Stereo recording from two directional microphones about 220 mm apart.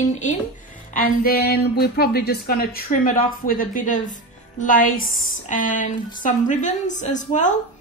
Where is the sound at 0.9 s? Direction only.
40° left (ahead or behind).